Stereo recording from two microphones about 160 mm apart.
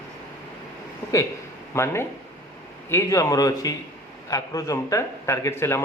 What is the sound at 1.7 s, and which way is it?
A man's voice, 15° left (ahead or behind).